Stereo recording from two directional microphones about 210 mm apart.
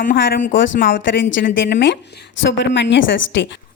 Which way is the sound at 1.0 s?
60° left (ahead or behind).